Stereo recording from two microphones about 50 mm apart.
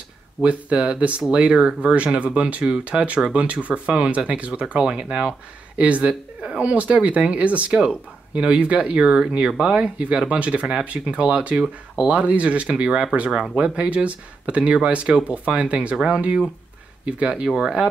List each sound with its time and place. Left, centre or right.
0.4 s speech: right
13.4 s speech: centre
13.7 s speech: right